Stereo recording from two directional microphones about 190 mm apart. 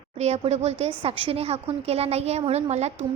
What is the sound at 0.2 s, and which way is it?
Speech, 35° right (ahead or behind).